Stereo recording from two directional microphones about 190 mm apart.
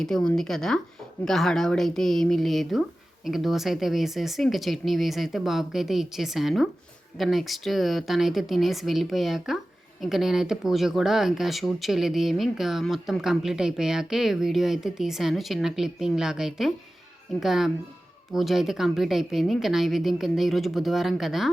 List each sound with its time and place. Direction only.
0.0 s speech: 5° left (ahead or behind)